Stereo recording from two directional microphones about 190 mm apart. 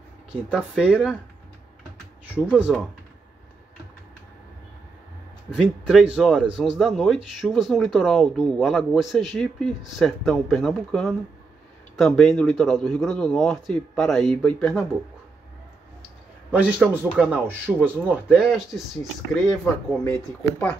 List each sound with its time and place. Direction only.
0.3 s speech: 5° right (ahead or behind)
2.5 s speech: 5° right (ahead or behind)
5.5 s speech: centre (ahead or behind)
16.6 s speech: 10° right (ahead or behind)
19.9 s speech: 10° left (ahead or behind)